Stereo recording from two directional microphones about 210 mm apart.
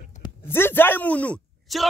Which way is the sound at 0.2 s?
10° left (ahead or behind).